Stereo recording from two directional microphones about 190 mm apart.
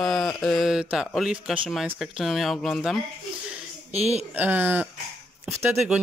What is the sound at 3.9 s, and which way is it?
Speech, 35° right (ahead or behind).